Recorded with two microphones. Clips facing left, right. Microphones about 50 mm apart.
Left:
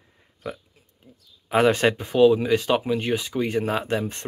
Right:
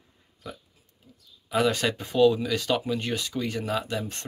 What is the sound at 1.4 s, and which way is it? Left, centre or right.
Speech, left.